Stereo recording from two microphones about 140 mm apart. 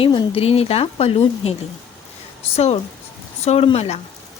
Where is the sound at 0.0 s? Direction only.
40° left (ahead or behind).